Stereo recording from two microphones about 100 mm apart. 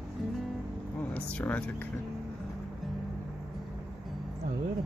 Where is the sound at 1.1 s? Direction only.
15° left (ahead or behind).